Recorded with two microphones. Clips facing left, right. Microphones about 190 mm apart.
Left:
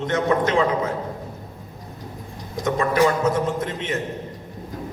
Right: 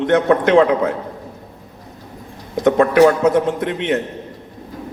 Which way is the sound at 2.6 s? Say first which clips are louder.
Right 8 dB; 65° right (ahead or behind).